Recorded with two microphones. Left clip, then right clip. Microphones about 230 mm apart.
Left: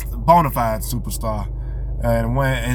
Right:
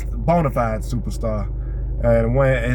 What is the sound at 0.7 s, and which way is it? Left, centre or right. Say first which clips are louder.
Speech: left 2 dB; left.